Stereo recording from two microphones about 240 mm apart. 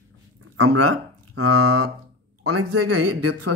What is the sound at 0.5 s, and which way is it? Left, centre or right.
Speech, right.